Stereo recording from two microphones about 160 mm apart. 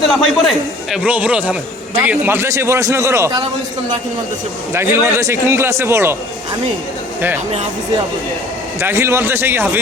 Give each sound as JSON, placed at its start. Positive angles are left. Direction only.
{"t": 0.0, "sound": "a man's voice", "side_deg": 0}
{"t": 4.7, "sound": "a man's voice", "side_deg": -15}
{"t": 8.8, "sound": "a man's voice", "side_deg": -15}